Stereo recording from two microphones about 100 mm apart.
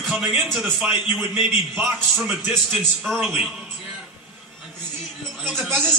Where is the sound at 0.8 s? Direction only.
15° right (ahead or behind).